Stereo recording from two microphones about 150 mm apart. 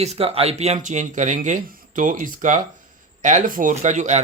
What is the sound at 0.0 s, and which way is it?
Speech, 45° right (ahead or behind).